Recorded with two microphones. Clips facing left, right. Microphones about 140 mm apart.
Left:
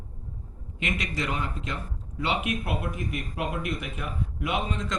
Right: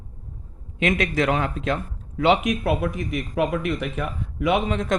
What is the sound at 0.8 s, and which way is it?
Speech, 65° right (ahead or behind).